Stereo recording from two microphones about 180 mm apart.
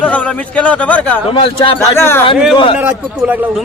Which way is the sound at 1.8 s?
15° left (ahead or behind).